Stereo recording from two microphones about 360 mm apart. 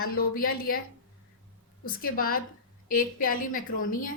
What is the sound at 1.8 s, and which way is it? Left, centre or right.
Speech, left.